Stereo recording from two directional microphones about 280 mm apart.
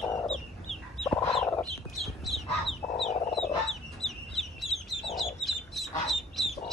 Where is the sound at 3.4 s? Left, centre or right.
Centre.